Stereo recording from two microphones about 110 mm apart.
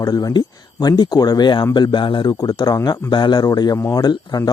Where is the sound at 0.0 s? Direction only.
35° left (ahead or behind).